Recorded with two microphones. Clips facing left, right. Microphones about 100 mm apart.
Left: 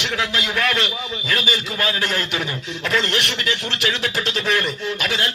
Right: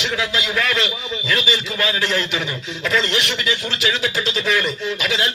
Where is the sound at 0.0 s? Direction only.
50° left (ahead or behind).